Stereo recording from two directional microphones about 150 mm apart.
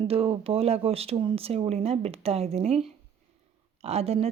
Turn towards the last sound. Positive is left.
turn(degrees=-45)  # may be behind; listen again after turning